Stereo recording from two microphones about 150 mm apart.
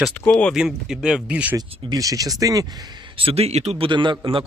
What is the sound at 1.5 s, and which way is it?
Speech, 25° right (ahead or behind).